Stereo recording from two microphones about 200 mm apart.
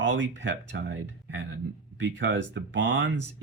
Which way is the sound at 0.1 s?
65° right (ahead or behind).